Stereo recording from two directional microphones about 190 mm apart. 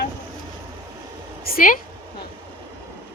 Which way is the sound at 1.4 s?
50° left (ahead or behind).